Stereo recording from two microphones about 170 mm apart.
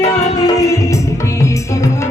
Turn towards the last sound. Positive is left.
turn(degrees=20)  # may be behind; listen again after turning